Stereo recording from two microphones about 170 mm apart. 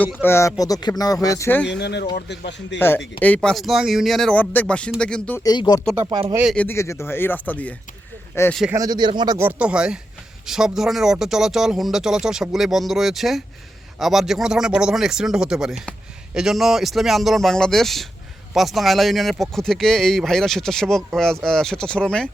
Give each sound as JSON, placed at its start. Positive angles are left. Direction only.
{"t": 0.0, "sound": "speech", "side_deg": 15}
{"t": 1.6, "sound": "a man's voice", "side_deg": 90}
{"t": 2.7, "sound": "speech", "side_deg": 10}
{"t": 5.4, "sound": "speech", "side_deg": 25}
{"t": 6.1, "sound": "speech", "side_deg": -30}
{"t": 6.3, "sound": "speech", "side_deg": -5}
{"t": 6.6, "sound": "speech", "side_deg": 15}
{"t": 8.7, "sound": "speech", "side_deg": -20}